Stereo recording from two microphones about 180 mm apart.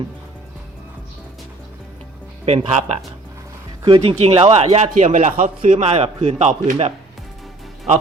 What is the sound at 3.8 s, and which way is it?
Speech, 25° right (ahead or behind).